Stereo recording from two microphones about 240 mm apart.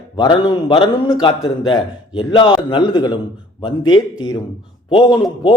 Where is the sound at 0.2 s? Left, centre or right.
Centre.